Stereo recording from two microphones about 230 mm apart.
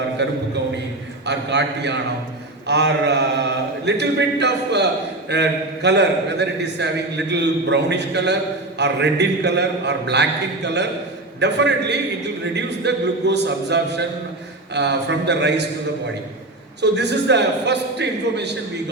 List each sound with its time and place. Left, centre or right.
0.2 s a man's voice: right
16.8 s a man's voice: right